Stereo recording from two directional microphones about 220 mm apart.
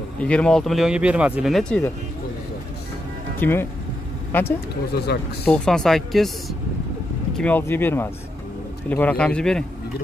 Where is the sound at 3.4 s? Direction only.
10° left (ahead or behind).